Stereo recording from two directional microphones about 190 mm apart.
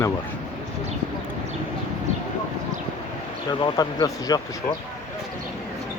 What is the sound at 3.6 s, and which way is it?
Speech, 20° left (ahead or behind).